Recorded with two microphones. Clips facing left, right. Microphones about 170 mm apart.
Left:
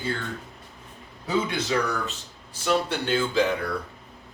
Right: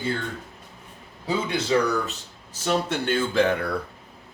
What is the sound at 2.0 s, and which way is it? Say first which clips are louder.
Speech: even; 40° right (ahead or behind).